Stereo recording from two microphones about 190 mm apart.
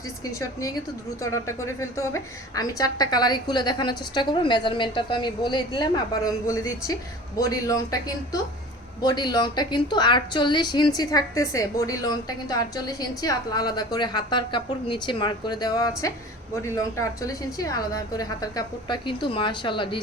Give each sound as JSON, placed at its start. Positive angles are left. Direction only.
{"t": 0.3, "sound": "a woman's voice", "side_deg": 15}